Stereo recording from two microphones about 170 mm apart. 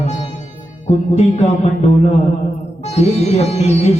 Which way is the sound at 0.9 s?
40° left (ahead or behind).